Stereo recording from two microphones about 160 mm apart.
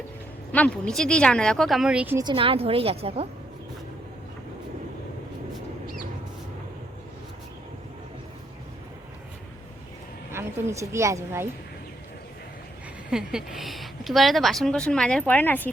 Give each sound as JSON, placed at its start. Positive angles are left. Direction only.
{"t": 0.5, "sound": "a woman's voice", "side_deg": 5}
{"t": 2.1, "sound": "a woman's voice", "side_deg": -30}
{"t": 10.3, "sound": "a woman's voice", "side_deg": -20}
{"t": 13.1, "sound": "a woman's voice", "side_deg": -5}